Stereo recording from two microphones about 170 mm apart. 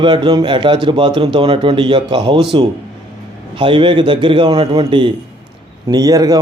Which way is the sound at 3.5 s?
30° right (ahead or behind).